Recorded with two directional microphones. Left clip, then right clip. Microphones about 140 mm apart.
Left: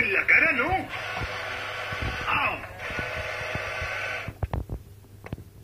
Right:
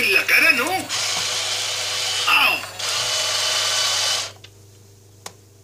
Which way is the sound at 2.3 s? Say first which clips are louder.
Right 9 dB; 35° right (ahead or behind).